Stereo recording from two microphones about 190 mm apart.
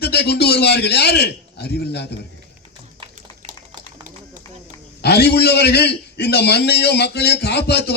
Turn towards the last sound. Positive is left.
turn(degrees=60)  # may be behind; listen again after turning